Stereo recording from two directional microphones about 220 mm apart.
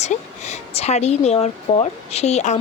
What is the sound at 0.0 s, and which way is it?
A woman's voice, 30° left (ahead or behind).